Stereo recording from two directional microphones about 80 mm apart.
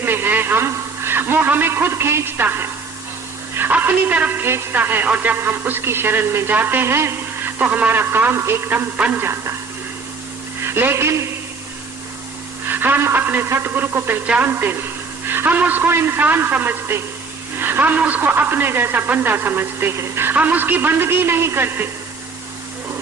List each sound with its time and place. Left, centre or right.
0.0 s a sound: right
3.5 s a woman's voice: right
7.6 s a woman's voice: centre
9.0 s speech: centre
9.2 s speech: right
10.6 s speech: right
12.6 s a woman's voice: right